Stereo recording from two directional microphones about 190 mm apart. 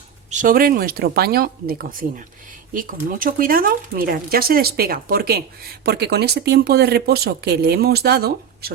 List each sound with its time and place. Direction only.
0.3 s speech: 45° right (ahead or behind)